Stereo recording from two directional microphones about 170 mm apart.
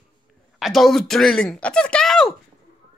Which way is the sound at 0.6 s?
Centre (ahead or behind).